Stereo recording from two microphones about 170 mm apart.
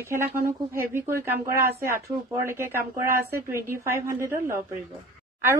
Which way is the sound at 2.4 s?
15° right (ahead or behind).